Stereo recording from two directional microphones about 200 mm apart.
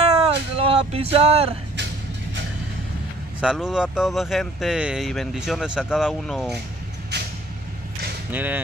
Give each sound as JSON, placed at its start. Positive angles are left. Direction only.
{"t": 0.0, "sound": "music", "side_deg": -30}
{"t": 3.3, "sound": "speech", "side_deg": -5}
{"t": 8.3, "sound": "speech", "side_deg": -10}